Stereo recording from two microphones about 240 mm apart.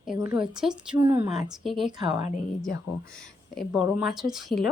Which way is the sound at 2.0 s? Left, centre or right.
Centre.